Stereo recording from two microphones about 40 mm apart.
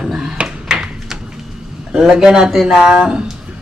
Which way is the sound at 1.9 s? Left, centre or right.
Centre.